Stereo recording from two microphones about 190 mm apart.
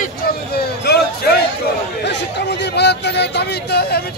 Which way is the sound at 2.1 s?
65° left (ahead or behind).